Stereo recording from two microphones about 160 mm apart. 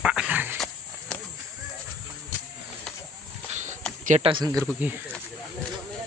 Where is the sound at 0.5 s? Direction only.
5° left (ahead or behind).